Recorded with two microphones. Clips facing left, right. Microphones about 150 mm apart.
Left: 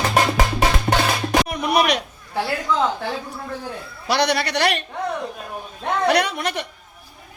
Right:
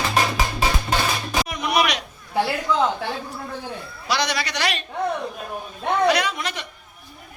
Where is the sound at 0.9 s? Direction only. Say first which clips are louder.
Left 4 dB; 65° left (ahead or behind).